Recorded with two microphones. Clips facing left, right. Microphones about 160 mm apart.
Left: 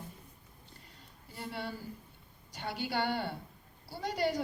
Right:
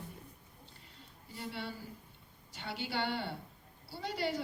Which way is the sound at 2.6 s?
45° left (ahead or behind).